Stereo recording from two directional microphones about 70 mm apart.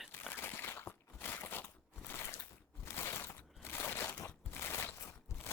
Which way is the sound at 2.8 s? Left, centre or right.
Left.